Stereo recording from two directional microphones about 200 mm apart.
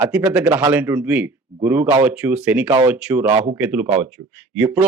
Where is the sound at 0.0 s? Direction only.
10° right (ahead or behind).